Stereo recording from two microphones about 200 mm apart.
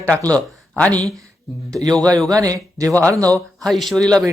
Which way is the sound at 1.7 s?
20° right (ahead or behind).